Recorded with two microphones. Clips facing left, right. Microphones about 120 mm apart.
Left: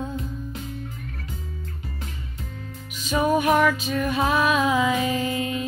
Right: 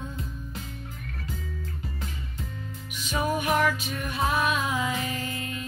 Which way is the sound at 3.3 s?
90° left.